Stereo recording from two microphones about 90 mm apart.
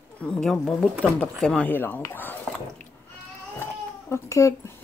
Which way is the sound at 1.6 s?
20° left (ahead or behind).